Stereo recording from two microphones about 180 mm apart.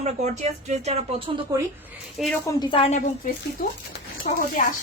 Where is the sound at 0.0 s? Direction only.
40° right (ahead or behind).